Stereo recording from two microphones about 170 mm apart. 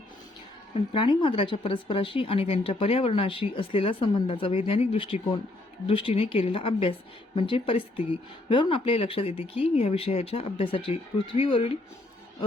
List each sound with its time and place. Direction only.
0.7 s speech: 30° left (ahead or behind)